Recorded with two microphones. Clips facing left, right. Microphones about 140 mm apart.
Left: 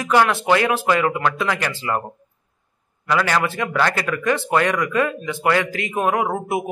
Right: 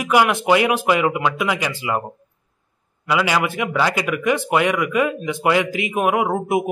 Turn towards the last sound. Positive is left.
turn(degrees=-15)  # may be behind; listen again after turning